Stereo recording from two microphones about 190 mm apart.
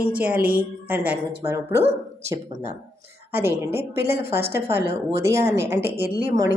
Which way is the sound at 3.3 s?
10° right (ahead or behind).